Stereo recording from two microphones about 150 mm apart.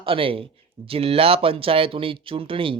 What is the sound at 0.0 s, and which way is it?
Speech, 35° right (ahead or behind).